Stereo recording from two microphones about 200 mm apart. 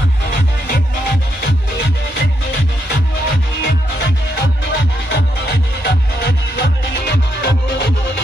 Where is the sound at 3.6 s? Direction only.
55° left (ahead or behind).